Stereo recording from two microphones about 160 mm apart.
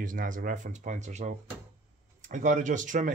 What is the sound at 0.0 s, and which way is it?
Speech, 55° right (ahead or behind).